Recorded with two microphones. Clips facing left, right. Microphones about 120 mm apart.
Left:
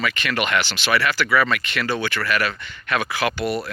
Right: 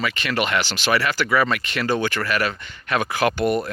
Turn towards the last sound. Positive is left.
turn(degrees=-45)  # may be behind; listen again after turning